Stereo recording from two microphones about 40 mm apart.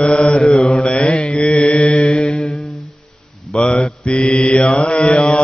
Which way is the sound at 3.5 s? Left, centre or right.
Left.